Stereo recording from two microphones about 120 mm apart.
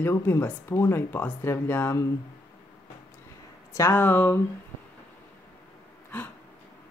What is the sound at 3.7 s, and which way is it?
Speech, 20° left (ahead or behind).